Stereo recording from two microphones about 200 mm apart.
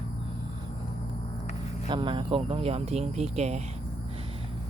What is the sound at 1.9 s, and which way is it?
Speech, 25° right (ahead or behind).